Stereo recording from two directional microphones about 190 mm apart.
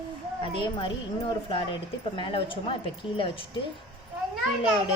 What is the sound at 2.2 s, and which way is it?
Speech, 25° left (ahead or behind).